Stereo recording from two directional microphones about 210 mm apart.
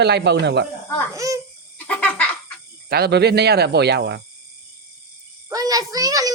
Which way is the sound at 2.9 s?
50° right (ahead or behind).